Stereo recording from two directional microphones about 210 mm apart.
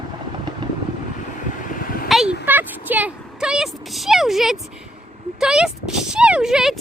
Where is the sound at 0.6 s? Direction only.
20° right (ahead or behind).